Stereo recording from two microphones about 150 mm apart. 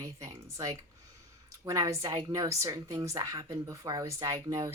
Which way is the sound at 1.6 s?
20° right (ahead or behind).